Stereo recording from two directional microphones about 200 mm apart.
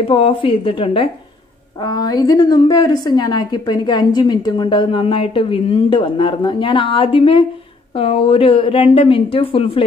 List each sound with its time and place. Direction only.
0.0 s a woman's voice: 25° left (ahead or behind)